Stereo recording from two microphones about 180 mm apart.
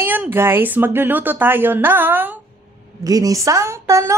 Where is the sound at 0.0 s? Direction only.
10° right (ahead or behind).